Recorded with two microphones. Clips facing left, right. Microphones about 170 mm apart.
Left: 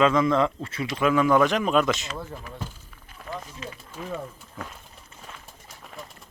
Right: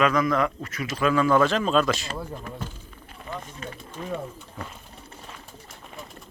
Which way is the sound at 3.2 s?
Centre (ahead or behind).